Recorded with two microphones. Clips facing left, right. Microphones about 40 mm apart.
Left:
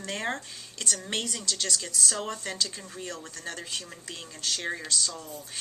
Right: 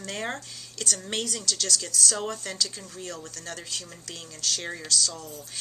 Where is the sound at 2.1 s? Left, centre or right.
Centre.